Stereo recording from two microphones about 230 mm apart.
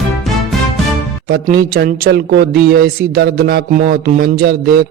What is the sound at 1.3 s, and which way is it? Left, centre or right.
Speech, right.